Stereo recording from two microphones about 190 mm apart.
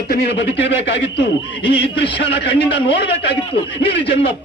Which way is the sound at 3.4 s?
30° left (ahead or behind).